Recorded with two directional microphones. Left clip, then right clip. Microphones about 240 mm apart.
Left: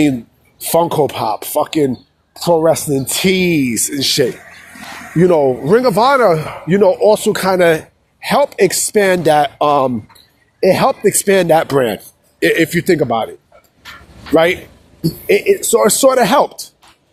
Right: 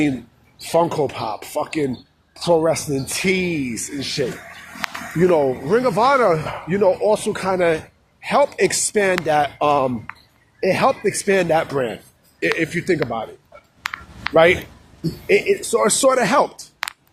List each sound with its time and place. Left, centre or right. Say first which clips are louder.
0.7 s speech: left 5 dB; left
14.3 s speech: left 2 dB; left